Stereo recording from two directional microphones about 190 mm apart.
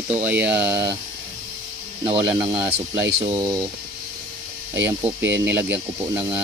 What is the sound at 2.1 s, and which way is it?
Speech, 15° right (ahead or behind).